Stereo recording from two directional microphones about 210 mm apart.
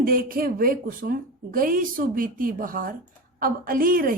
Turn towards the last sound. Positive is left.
turn(degrees=-40)  # may be behind; listen again after turning